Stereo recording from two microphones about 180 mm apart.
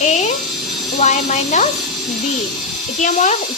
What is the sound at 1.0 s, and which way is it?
Speech, 40° left (ahead or behind).